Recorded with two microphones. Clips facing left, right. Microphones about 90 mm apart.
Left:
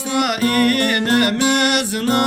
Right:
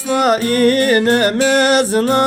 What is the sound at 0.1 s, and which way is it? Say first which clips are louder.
Music: right 4 dB; 35° right (ahead or behind).